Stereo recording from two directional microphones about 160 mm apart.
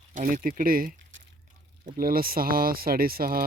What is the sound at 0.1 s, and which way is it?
Speech, 50° right (ahead or behind).